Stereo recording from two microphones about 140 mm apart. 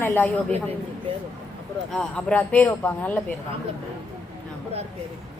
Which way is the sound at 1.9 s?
5° left (ahead or behind).